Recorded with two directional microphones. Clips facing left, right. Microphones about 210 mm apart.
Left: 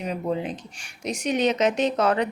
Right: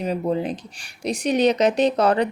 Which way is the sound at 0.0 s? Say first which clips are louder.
Right 4 dB; 35° right (ahead or behind).